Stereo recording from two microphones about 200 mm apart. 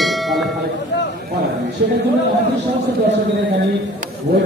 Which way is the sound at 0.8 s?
60° left (ahead or behind).